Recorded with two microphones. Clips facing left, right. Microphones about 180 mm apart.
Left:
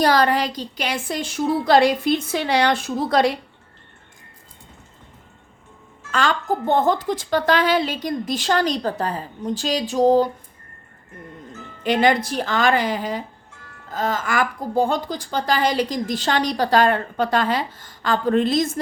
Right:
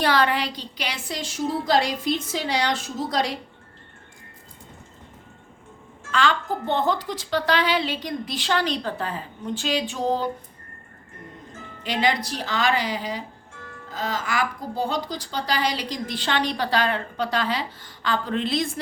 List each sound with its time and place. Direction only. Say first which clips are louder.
0.0 s a woman's voice: left 4 dB; 40° left (ahead or behind); by 3.3 s 60° left (ahead or behind)
6.1 s speech: left 2 dB; 45° left (ahead or behind)
11.8 s speech: left 6 dB; 50° left (ahead or behind)